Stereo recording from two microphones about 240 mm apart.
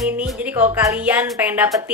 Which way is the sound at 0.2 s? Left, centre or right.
Centre.